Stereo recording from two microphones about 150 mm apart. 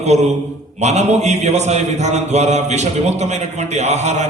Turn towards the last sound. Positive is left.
turn(degrees=-50)  # may be behind; listen again after turning